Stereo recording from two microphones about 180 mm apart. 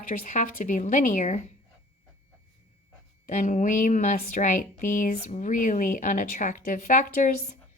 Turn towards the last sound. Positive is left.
turn(degrees=45)  # may be behind; listen again after turning